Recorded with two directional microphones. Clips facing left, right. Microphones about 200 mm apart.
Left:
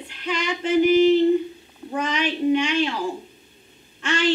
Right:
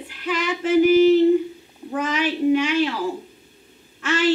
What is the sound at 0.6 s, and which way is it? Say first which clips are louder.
A woman's voice: right 2 dB; 5° right (ahead or behind).